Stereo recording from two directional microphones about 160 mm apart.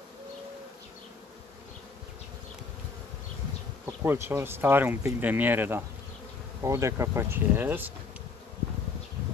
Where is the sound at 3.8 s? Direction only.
15° right (ahead or behind).